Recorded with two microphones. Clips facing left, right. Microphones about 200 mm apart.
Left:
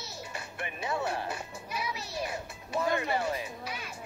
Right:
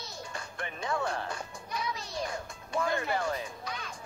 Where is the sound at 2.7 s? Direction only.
20° left (ahead or behind).